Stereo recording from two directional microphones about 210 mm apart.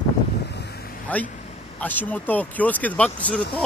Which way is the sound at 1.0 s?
5° left (ahead or behind).